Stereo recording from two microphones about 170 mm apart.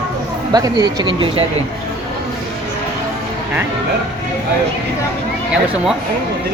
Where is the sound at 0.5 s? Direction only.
20° right (ahead or behind).